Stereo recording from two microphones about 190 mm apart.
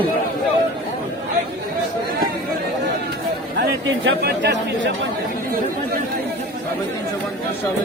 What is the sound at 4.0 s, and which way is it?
Speech, 60° right (ahead or behind).